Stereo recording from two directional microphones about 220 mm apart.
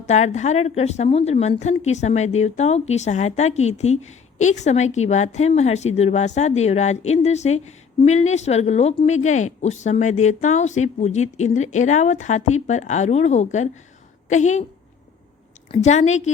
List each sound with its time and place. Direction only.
0.0 s a woman's voice: 30° left (ahead or behind)
15.7 s a woman's voice: 30° left (ahead or behind)